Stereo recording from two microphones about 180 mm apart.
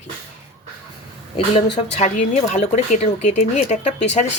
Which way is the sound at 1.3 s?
35° left (ahead or behind).